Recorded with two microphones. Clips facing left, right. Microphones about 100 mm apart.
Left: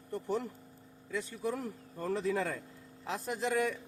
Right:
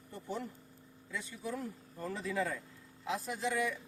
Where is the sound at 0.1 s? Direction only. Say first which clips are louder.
Left 6 dB; 55° left (ahead or behind).